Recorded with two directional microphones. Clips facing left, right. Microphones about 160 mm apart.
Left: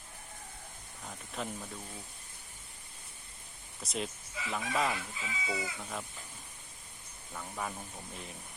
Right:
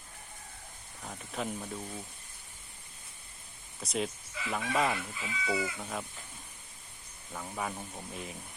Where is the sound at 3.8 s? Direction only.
Centre (ahead or behind).